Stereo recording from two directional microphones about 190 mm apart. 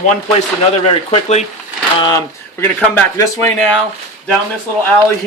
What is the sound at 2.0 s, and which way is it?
Speech, 15° left (ahead or behind).